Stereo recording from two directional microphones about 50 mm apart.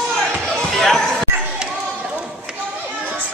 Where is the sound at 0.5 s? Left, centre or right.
Centre.